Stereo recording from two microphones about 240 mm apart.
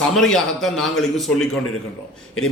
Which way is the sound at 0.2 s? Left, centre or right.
Centre.